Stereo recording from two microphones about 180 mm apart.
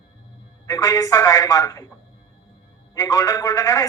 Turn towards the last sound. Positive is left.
turn(degrees=20)  # may be behind; listen again after turning